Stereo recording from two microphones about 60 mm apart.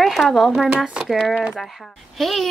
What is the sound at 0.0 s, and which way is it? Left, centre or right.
Speech, centre.